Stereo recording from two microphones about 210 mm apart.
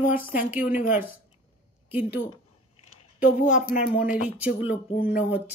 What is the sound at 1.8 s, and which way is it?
Speech, 10° right (ahead or behind).